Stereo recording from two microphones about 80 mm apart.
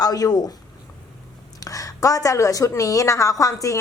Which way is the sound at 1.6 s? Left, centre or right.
Left.